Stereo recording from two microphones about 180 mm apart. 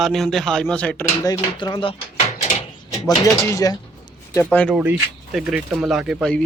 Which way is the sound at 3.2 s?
20° left (ahead or behind).